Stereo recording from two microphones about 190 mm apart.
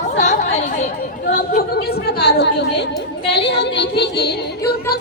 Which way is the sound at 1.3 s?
45° left (ahead or behind).